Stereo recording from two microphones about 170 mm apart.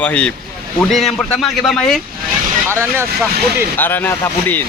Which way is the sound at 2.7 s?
15° right (ahead or behind).